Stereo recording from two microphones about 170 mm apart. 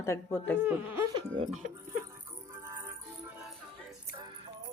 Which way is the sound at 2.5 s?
15° right (ahead or behind).